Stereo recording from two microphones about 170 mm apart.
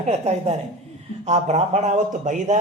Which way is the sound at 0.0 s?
40° right (ahead or behind).